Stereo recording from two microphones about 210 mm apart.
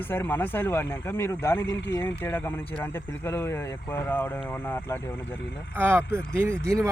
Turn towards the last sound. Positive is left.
turn(degrees=-15)  # may be behind; listen again after turning